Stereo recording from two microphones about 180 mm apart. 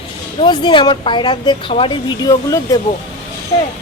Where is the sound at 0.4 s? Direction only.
25° left (ahead or behind).